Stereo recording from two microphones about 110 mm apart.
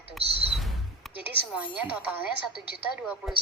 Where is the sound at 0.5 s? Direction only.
Centre (ahead or behind).